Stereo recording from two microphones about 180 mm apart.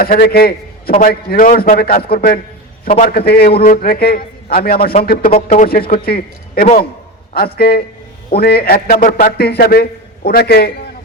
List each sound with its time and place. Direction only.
0.0 s a man's voice: 55° left (ahead or behind)